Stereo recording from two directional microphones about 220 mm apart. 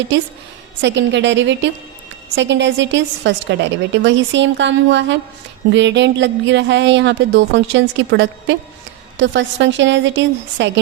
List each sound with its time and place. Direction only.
0.8 s a woman's voice: 55° right (ahead or behind)